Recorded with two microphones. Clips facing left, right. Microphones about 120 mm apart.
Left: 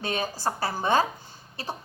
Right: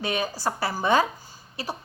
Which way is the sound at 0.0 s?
45° left (ahead or behind).